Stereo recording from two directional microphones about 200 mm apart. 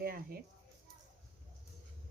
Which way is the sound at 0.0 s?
50° right (ahead or behind).